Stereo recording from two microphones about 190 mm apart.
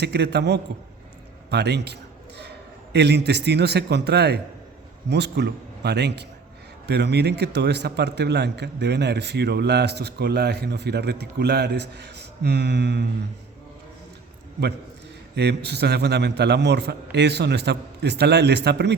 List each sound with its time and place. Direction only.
0.0 s a man's voice: 60° right (ahead or behind)
15.4 s a man's voice: 60° right (ahead or behind)